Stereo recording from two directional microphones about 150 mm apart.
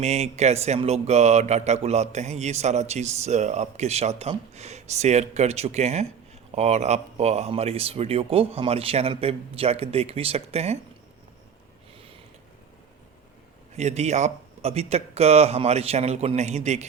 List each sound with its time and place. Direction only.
0.0 s speech: 45° right (ahead or behind)
13.7 s speech: 45° right (ahead or behind)